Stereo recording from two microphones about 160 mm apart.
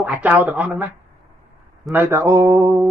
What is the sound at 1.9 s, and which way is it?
Speech, 15° right (ahead or behind).